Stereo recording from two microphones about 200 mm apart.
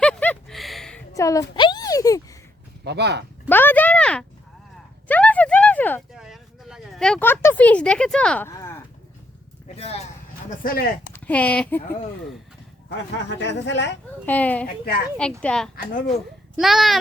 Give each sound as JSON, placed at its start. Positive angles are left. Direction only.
{"t": 0.0, "sound": "a sound", "side_deg": 5}
{"t": 1.1, "sound": "speech", "side_deg": 15}
{"t": 2.8, "sound": "speech", "side_deg": -55}
{"t": 3.5, "sound": "a sound", "side_deg": 10}
{"t": 6.1, "sound": "a sound", "side_deg": 0}
{"t": 9.6, "sound": "speech", "side_deg": 30}
{"t": 10.5, "sound": "speech", "side_deg": 45}
{"t": 11.1, "sound": "speech", "side_deg": 5}
{"t": 13.4, "sound": "speech", "side_deg": 60}
{"t": 14.3, "sound": "a woman's voice", "side_deg": 10}
{"t": 15.7, "sound": "speech", "side_deg": 45}
{"t": 16.6, "sound": "a woman's voice", "side_deg": 0}